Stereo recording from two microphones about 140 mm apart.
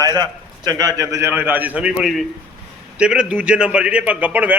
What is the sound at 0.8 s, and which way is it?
A man's voice, 25° right (ahead or behind).